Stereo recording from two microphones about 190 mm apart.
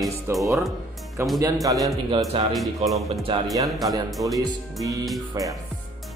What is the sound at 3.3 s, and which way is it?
Music, 25° right (ahead or behind).